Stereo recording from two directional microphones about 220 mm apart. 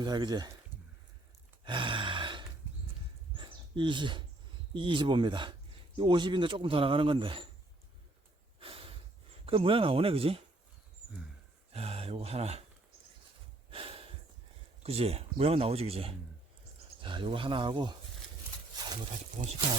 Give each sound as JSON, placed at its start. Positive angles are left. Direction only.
{"t": 0.0, "sound": "speech", "side_deg": -20}
{"t": 1.6, "sound": "gasp", "side_deg": -20}
{"t": 3.3, "sound": "a sound", "side_deg": -20}
{"t": 4.7, "sound": "speech", "side_deg": -20}
{"t": 8.5, "sound": "snort", "side_deg": -25}
{"t": 9.5, "sound": "speech", "side_deg": -25}
{"t": 11.7, "sound": "speech", "side_deg": -25}
{"t": 13.7, "sound": "snort", "side_deg": -25}
{"t": 14.8, "sound": "speech", "side_deg": -25}
{"t": 19.4, "sound": "speech", "side_deg": -35}